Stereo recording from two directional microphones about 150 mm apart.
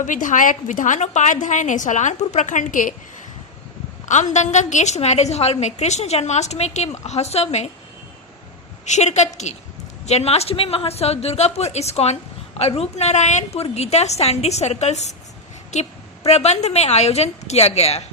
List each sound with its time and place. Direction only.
0.0 s a woman's voice: 60° left (ahead or behind)
4.1 s a woman's voice: 50° left (ahead or behind)
8.8 s a woman's voice: 50° left (ahead or behind)